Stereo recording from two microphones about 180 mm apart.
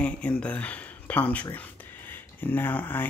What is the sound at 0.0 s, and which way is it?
Speech, 5° left (ahead or behind).